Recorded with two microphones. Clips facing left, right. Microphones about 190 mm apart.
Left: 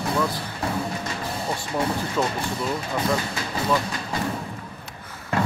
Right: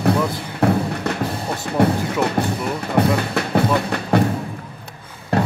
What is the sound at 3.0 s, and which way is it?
Music, 65° right (ahead or behind).